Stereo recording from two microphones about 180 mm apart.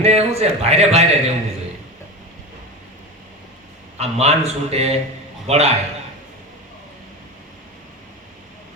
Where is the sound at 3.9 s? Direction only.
35° right (ahead or behind).